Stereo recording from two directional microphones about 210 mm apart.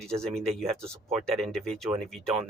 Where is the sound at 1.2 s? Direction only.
Centre (ahead or behind).